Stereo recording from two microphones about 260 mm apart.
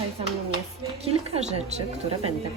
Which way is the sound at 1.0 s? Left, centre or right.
Right.